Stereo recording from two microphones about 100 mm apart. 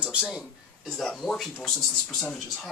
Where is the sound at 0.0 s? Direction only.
10° right (ahead or behind).